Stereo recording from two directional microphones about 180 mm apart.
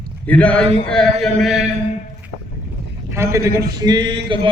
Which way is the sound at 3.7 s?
25° right (ahead or behind).